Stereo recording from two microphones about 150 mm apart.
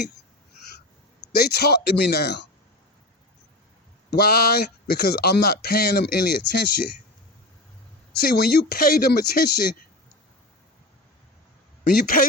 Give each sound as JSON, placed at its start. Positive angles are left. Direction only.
{"t": 1.3, "sound": "speech", "side_deg": 90}
{"t": 4.1, "sound": "speech", "side_deg": 90}
{"t": 8.2, "sound": "speech", "side_deg": 90}
{"t": 11.9, "sound": "speech", "side_deg": 75}